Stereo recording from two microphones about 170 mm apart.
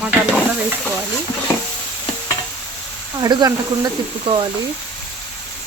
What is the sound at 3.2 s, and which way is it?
Speech, 20° right (ahead or behind).